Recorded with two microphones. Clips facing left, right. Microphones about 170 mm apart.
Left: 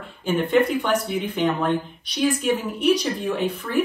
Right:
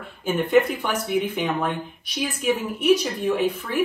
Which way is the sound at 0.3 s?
5° right (ahead or behind).